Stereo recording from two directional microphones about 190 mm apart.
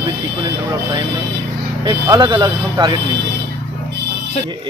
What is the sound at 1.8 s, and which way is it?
Speech, 20° right (ahead or behind).